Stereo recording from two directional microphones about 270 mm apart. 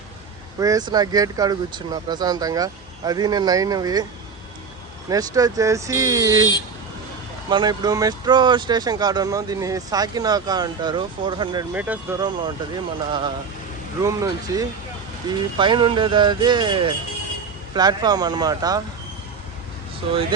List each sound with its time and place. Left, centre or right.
0.6 s speech: centre
5.0 s speech: centre
7.5 s speech: centre
11.7 s speech: centre